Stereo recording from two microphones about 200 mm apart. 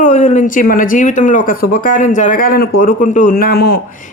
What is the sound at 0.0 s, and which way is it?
Speech, 40° left (ahead or behind).